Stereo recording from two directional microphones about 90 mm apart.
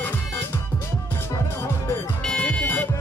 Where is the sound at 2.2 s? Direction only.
10° left (ahead or behind).